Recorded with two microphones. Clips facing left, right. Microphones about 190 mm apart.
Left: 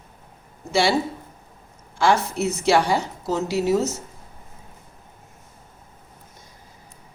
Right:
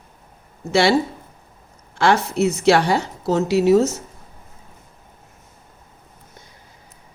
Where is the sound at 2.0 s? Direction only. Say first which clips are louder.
Right 3 dB; 65° right (ahead or behind).